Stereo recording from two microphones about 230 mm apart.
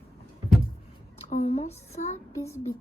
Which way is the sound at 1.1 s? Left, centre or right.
Left.